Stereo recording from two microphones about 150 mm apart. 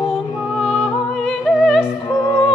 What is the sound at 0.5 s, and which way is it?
Music, centre (ahead or behind).